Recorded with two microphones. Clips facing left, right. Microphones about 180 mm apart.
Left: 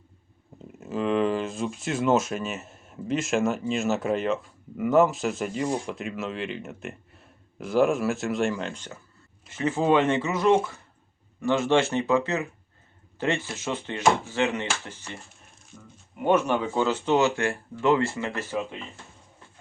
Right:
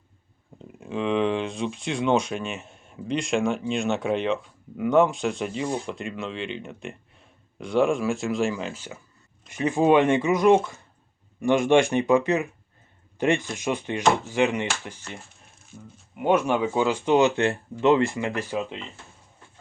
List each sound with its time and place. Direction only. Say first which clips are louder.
0.8 s speech: even; 5° left (ahead or behind); by 18.8 s 15° right (ahead or behind)